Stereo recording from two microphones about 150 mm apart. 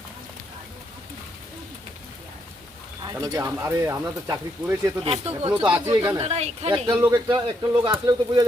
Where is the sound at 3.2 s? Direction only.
25° right (ahead or behind).